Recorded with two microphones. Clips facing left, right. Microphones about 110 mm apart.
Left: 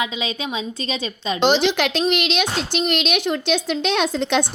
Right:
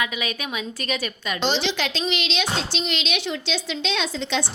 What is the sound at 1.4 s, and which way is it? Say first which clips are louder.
A child's voice: left 7 dB; 55° left (ahead or behind).